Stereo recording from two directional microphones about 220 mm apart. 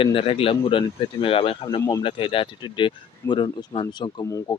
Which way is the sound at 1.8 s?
15° left (ahead or behind).